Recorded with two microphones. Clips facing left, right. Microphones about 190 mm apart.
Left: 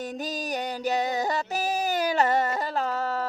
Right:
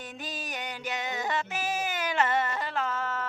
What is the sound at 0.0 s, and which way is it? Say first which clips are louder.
Music: left 8 dB; 40° left (ahead or behind).